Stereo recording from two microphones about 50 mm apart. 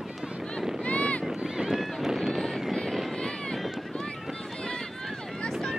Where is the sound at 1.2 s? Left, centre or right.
Centre.